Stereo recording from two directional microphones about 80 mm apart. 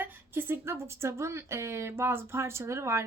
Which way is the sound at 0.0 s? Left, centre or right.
Right.